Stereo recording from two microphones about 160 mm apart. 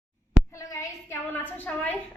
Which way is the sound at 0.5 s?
20° left (ahead or behind).